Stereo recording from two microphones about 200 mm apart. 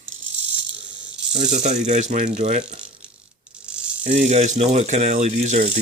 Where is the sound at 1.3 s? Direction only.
25° right (ahead or behind).